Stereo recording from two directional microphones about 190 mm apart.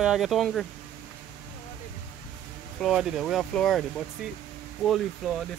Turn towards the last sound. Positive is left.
turn(degrees=0)  # may be behind; listen again after turning